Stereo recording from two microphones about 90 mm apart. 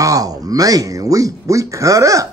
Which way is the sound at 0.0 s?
40° right (ahead or behind).